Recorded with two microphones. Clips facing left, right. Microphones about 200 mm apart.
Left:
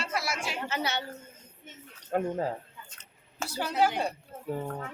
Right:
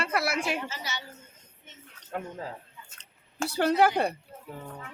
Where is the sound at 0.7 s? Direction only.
60° left (ahead or behind).